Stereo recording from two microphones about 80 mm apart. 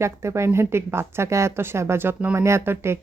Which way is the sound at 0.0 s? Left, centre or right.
Right.